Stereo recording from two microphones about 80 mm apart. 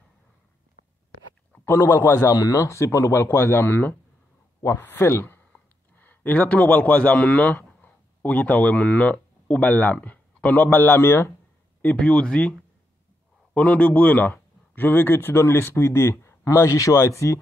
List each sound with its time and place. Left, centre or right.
1.6 s speech: left
11.8 s speech: centre; by 17.4 s left